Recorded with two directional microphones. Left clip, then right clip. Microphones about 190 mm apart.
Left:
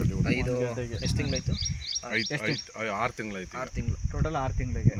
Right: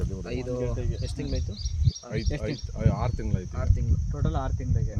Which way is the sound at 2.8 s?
25° right (ahead or behind).